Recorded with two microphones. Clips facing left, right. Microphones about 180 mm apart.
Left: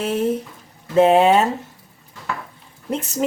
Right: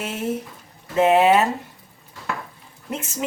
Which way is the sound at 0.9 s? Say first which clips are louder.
Left 2 dB; 30° left (ahead or behind).